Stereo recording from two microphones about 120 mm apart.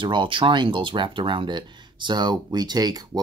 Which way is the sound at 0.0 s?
40° right (ahead or behind).